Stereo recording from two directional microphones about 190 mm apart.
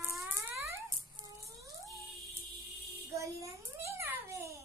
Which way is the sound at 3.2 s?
15° right (ahead or behind).